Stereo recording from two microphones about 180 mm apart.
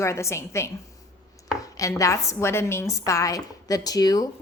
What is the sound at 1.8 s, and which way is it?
A woman's voice, 15° left (ahead or behind).